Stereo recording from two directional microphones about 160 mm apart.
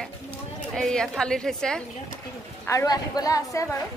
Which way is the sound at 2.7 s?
20° left (ahead or behind).